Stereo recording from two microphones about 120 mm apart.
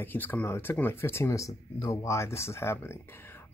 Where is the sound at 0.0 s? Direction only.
15° left (ahead or behind).